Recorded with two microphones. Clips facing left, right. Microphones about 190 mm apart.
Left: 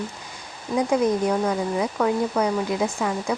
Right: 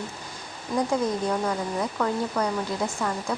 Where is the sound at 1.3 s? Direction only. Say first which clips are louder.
Left 4 dB; 10° left (ahead or behind).